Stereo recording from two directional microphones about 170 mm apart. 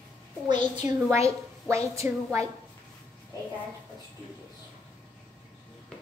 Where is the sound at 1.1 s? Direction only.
15° right (ahead or behind).